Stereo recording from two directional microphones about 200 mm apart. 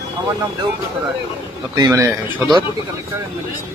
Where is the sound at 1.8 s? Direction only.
15° right (ahead or behind).